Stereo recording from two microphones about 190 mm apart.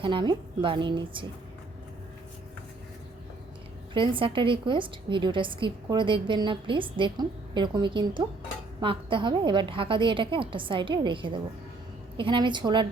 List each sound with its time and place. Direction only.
0.0 s a woman's voice: 25° right (ahead or behind)
3.9 s a woman's voice: 25° right (ahead or behind)